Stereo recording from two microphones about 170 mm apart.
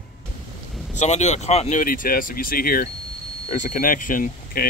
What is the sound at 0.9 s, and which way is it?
Speech, 45° left (ahead or behind).